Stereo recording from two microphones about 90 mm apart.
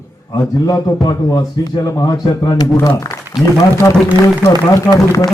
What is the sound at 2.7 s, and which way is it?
Speech, 35° left (ahead or behind).